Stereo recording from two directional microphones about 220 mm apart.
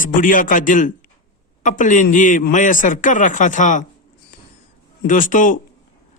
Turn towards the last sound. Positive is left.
turn(degrees=35)  # may be behind; listen again after turning